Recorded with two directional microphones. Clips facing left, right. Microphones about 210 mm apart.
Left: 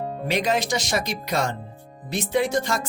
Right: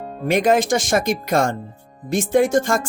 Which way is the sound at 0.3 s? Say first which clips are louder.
Right 8 dB; 50° right (ahead or behind).